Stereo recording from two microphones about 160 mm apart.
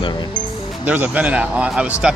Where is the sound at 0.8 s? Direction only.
10° right (ahead or behind).